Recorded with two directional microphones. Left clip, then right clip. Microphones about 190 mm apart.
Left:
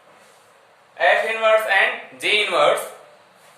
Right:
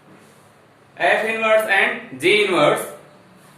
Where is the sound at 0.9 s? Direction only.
15° left (ahead or behind).